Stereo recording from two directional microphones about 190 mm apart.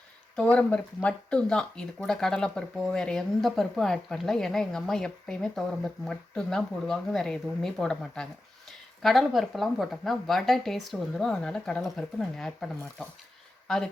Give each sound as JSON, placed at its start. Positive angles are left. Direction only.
{"t": 0.5, "sound": "speech", "side_deg": 5}